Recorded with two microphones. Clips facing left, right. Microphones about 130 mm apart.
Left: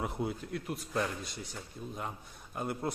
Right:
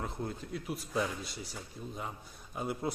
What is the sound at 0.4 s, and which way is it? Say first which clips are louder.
A man's voice: left 1 dB; centre (ahead or behind).